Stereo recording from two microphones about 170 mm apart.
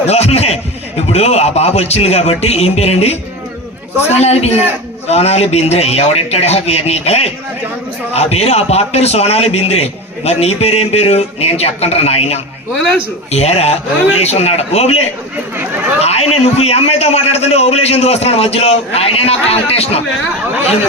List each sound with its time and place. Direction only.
0.1 s a man's voice: 40° left (ahead or behind)
4.2 s a man's voice: 40° left (ahead or behind)
16.0 s a man's voice: 35° left (ahead or behind)